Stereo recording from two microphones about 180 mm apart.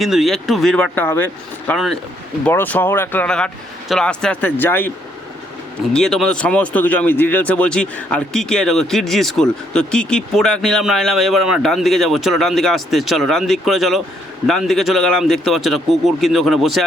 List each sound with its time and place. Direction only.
0.0 s speech: centre (ahead or behind)
5.9 s speech: centre (ahead or behind)